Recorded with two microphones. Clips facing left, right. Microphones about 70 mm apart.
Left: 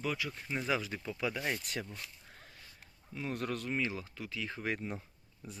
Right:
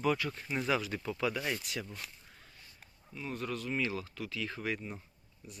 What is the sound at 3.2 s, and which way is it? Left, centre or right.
Speech, left.